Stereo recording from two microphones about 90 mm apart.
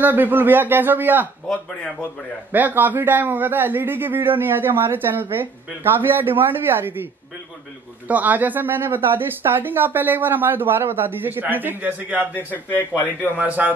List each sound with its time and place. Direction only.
0.0 s a man's voice: 20° right (ahead or behind)
1.5 s speech: 10° left (ahead or behind)
2.5 s a man's voice: 20° right (ahead or behind)
8.1 s a man's voice: 20° right (ahead or behind)
12.4 s a man's voice: 20° left (ahead or behind)
13.4 s a man's voice: 20° right (ahead or behind)